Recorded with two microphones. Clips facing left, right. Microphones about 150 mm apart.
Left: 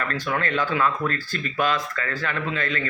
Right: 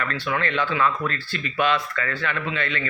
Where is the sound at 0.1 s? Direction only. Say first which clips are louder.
Even; 40° left (ahead or behind).